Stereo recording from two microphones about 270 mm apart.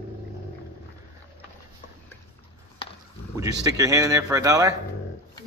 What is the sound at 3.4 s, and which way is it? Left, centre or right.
Speech, centre.